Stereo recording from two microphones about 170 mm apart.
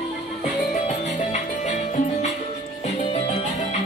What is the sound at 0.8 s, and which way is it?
Music, 45° left (ahead or behind).